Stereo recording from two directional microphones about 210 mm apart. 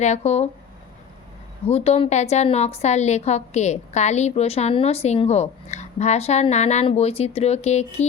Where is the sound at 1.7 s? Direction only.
30° left (ahead or behind).